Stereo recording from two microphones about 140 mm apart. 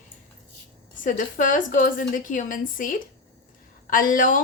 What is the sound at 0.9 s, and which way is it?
A woman's voice, 70° left (ahead or behind).